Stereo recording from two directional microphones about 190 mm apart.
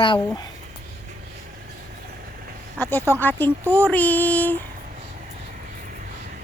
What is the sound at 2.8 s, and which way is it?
Female singing, 10° left (ahead or behind).